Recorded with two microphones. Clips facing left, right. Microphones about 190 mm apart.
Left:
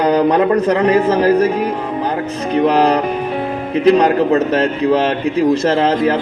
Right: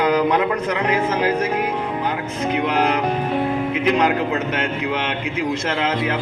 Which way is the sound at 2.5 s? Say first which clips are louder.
Left 8 dB; 35° left (ahead or behind).